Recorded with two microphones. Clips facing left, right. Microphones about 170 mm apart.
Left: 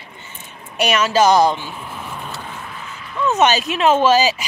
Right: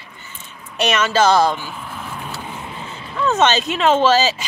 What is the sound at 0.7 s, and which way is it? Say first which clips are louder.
Speech: left 1 dB; 10° left (ahead or behind).